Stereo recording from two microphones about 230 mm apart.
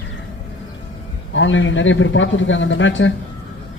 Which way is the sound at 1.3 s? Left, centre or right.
Left.